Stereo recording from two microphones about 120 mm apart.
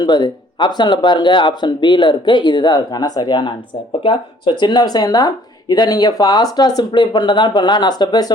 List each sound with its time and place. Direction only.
0.0 s speech: 40° left (ahead or behind)